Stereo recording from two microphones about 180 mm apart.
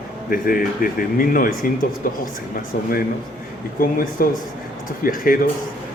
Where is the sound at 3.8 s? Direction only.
50° left (ahead or behind).